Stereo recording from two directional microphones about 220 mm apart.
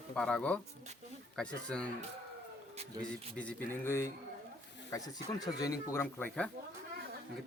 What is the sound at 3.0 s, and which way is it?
Speech, 5° left (ahead or behind).